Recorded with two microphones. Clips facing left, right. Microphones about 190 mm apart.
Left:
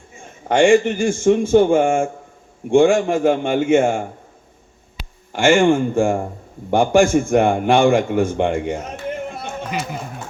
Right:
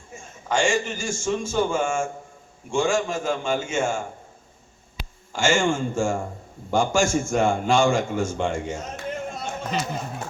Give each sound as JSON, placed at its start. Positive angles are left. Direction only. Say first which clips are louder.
{"t": 0.4, "sound": "a man's voice", "louder": "left 10 dB", "side_deg": 60}
{"t": 5.3, "sound": "a man's voice", "louder": "left 8 dB", "side_deg": 60}